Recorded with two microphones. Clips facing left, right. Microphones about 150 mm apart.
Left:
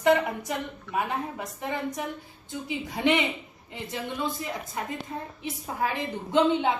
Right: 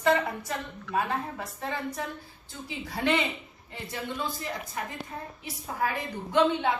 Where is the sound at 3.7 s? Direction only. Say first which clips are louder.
Left 2 dB; 20° left (ahead or behind).